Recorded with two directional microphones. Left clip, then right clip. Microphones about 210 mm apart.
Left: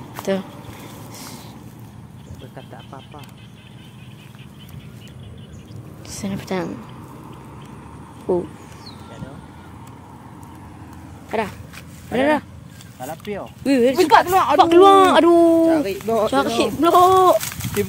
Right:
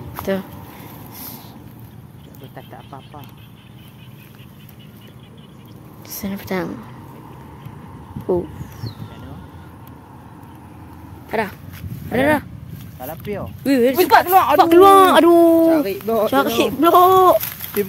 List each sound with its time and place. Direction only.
0.2 s speech: 5° right (ahead or behind)
6.0 s speech: 5° right (ahead or behind)
8.3 s speech: 10° right (ahead or behind)
11.3 s speech: 15° right (ahead or behind)
13.3 s speech: 40° right (ahead or behind)
13.7 s speech: 15° right (ahead or behind)
14.3 s speech: 55° right (ahead or behind)
14.6 s speech: 20° right (ahead or behind)
15.7 s speech: 35° right (ahead or behind)
16.0 s speech: 25° right (ahead or behind)